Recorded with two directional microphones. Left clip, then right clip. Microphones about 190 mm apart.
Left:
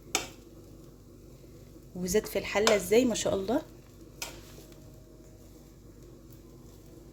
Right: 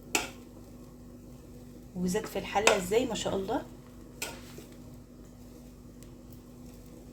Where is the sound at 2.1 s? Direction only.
30° left (ahead or behind).